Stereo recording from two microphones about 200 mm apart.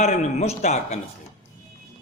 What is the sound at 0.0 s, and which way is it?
Speech, 35° left (ahead or behind).